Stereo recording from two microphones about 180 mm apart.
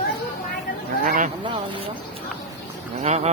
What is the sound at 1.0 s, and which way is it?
Speech, 50° right (ahead or behind).